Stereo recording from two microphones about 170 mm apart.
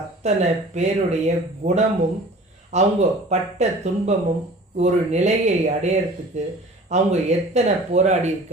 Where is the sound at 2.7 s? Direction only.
40° right (ahead or behind).